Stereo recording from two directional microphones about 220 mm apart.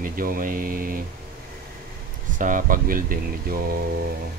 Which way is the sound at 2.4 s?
40° right (ahead or behind).